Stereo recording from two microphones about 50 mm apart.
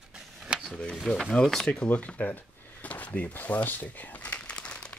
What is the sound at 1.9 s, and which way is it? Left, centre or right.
Speech, left.